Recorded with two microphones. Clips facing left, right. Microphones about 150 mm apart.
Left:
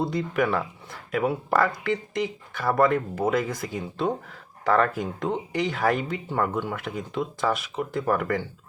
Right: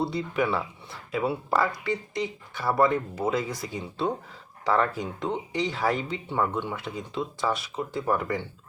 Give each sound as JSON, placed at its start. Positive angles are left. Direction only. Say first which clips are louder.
{"t": 0.0, "sound": "speech", "louder": "left 2 dB", "side_deg": 50}